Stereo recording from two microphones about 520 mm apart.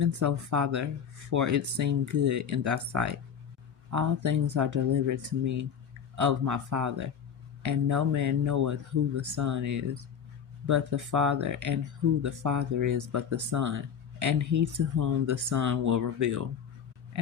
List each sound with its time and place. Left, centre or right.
0.0 s speech: right